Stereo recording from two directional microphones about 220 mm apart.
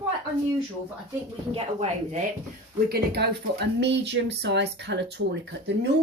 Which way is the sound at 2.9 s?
45° right (ahead or behind).